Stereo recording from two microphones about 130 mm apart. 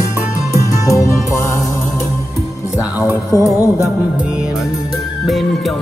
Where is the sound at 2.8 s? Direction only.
15° right (ahead or behind).